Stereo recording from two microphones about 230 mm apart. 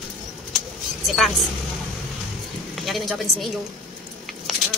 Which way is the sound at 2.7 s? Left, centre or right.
Centre.